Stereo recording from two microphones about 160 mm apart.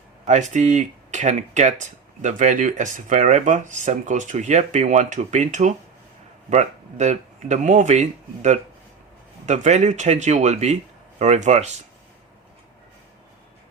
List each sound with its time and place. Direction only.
0.3 s speech: 50° right (ahead or behind)